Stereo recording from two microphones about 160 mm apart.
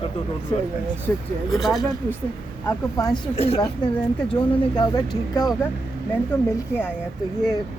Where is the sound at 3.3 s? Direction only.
40° left (ahead or behind).